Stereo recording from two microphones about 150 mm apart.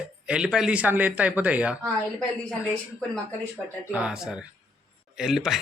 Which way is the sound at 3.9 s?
10° right (ahead or behind).